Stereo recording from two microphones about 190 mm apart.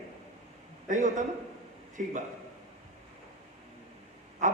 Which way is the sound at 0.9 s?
40° right (ahead or behind).